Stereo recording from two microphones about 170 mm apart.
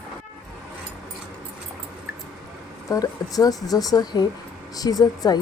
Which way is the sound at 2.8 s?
20° left (ahead or behind).